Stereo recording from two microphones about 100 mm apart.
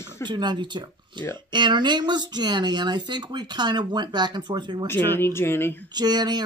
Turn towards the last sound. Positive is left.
turn(degrees=-45)  # may be behind; listen again after turning